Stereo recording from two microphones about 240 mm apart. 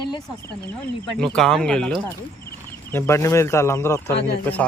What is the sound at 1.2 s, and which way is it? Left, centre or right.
Speech, centre.